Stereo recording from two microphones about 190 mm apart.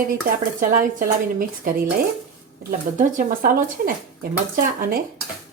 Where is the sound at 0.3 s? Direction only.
45° right (ahead or behind).